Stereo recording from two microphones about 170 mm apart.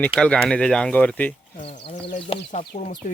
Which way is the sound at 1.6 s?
35° left (ahead or behind).